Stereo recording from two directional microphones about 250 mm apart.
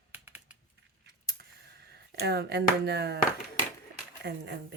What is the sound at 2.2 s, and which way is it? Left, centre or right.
Speech, right.